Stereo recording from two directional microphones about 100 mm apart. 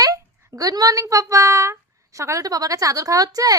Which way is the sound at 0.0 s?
35° right (ahead or behind).